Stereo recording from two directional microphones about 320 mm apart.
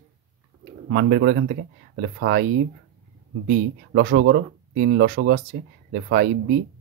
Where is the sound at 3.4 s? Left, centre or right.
Right.